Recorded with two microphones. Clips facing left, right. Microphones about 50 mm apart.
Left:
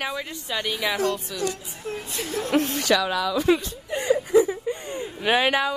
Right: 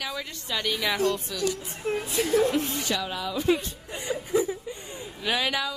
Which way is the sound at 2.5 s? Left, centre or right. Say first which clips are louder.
Left 6 dB; left.